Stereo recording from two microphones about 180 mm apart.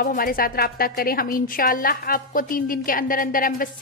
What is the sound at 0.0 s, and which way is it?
A woman's voice, 50° left (ahead or behind).